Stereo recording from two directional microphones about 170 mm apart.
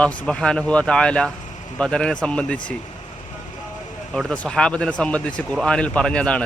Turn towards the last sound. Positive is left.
turn(degrees=5)  # may be behind; listen again after turning